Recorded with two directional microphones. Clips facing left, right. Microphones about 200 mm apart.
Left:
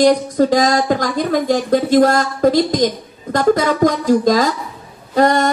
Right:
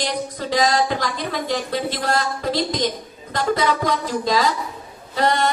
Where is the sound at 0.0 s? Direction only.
45° left (ahead or behind).